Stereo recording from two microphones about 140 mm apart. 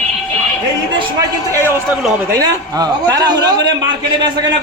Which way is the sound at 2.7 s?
25° right (ahead or behind).